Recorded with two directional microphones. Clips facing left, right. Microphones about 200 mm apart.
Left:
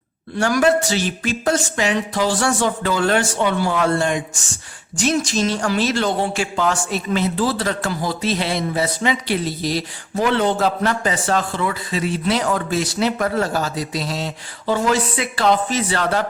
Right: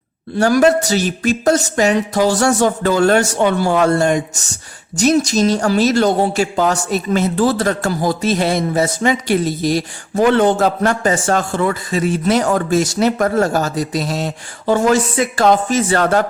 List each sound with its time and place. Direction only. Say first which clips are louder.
0.3 s a man's voice: right 4 dB; 40° right (ahead or behind)